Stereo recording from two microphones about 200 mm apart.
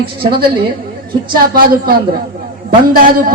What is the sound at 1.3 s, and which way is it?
A woman's voice, 45° right (ahead or behind).